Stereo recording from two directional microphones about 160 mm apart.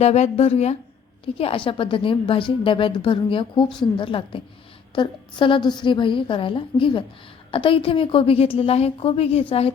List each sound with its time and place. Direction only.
0.0 s a woman's voice: 40° left (ahead or behind)